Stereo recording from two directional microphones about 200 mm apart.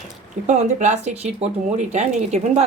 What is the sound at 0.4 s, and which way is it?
Speech, 35° right (ahead or behind).